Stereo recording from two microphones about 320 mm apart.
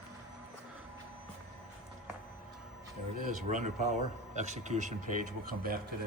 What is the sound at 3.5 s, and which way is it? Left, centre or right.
Speech, right.